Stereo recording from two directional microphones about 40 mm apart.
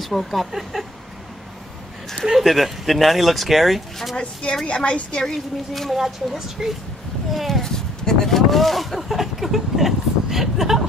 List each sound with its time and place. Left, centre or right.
0.0 s speech: centre
2.3 s speech: centre
4.2 s a woman's voice: left
5.2 s speech: centre
7.6 s speech: centre